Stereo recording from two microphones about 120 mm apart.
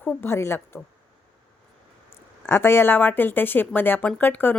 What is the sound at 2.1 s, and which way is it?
Speech, 20° left (ahead or behind).